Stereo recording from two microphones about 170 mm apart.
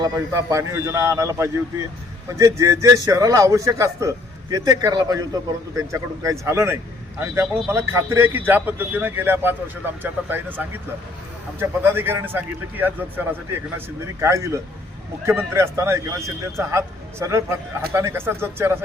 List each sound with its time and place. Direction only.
0.0 s a man's voice: 15° right (ahead or behind)